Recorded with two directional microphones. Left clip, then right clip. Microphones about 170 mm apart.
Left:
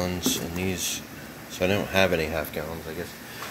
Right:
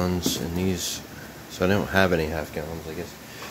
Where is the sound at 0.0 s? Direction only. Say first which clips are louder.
Right 1 dB; 35° right (ahead or behind).